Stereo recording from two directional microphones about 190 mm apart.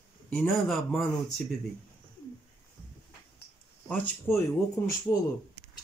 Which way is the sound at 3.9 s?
10° left (ahead or behind).